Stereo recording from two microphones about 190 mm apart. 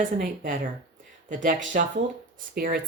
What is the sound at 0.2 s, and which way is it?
Speech, 50° right (ahead or behind).